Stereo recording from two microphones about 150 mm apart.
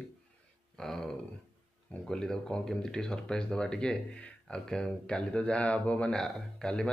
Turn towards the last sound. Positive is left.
turn(degrees=5)  # may be behind; listen again after turning